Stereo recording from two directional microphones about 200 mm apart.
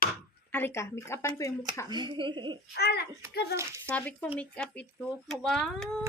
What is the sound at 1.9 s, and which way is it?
Speech, 20° right (ahead or behind).